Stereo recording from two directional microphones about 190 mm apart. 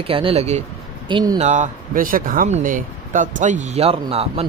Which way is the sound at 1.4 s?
40° right (ahead or behind).